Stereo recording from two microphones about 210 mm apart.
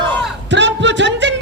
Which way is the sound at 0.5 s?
60° right (ahead or behind).